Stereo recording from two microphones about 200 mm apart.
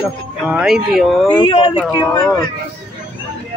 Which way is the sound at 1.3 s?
25° left (ahead or behind).